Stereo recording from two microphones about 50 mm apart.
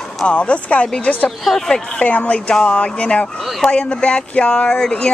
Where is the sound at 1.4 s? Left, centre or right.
Centre.